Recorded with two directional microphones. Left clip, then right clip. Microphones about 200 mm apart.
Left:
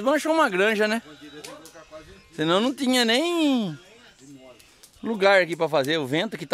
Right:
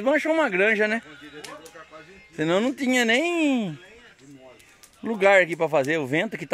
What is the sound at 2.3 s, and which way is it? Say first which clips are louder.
Speech: left 1 dB; 15° left (ahead or behind).